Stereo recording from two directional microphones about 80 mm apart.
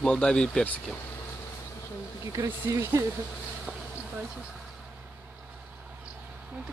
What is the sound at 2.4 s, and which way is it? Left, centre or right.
Speech, right.